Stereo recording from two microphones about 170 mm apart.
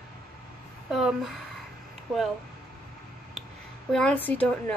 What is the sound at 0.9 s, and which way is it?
Speech, centre (ahead or behind).